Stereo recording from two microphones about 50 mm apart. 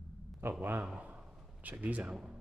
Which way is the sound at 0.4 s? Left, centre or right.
Right.